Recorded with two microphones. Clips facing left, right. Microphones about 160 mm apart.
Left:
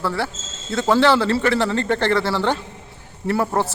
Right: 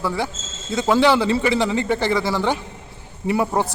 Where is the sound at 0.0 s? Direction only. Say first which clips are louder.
Even; 15° right (ahead or behind).